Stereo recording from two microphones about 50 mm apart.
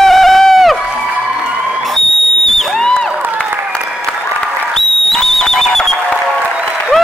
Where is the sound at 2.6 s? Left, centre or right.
Centre.